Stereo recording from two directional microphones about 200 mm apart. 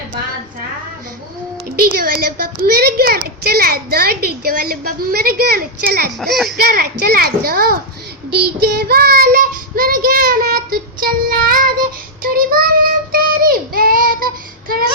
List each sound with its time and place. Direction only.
1.9 s speech: 50° right (ahead or behind)
6.1 s speech: centre (ahead or behind)
6.6 s speech: 50° right (ahead or behind)
12.2 s child singing: 45° right (ahead or behind)